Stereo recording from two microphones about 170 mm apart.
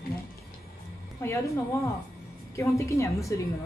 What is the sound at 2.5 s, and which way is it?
Speech, 15° left (ahead or behind).